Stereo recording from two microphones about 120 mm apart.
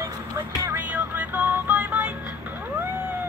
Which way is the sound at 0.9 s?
15° right (ahead or behind).